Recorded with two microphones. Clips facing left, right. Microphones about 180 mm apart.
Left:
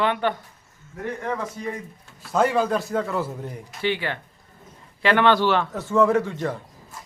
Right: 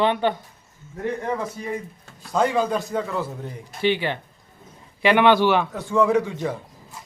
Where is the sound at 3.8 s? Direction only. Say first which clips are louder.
Right 4 dB; 20° right (ahead or behind).